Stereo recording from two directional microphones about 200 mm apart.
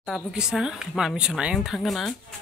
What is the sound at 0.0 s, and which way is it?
Speech, 5° right (ahead or behind).